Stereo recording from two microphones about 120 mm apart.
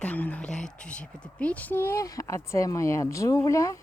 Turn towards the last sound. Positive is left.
turn(degrees=25)  # may be behind; listen again after turning